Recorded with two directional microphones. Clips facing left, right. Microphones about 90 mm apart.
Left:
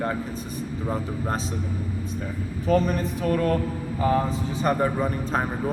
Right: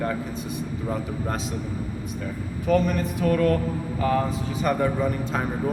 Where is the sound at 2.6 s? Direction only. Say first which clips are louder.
Even; 35° left (ahead or behind).